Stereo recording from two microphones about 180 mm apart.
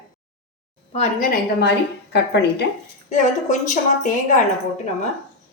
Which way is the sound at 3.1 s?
45° left (ahead or behind).